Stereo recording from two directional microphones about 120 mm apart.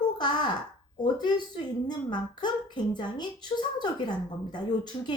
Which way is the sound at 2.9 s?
35° left (ahead or behind).